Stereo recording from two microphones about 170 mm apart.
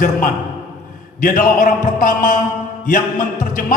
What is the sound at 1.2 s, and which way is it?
A man's voice, 50° left (ahead or behind).